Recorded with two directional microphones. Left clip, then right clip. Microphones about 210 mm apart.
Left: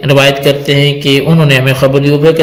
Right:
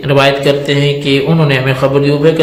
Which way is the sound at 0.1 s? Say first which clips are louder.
Left 2 dB; 50° left (ahead or behind).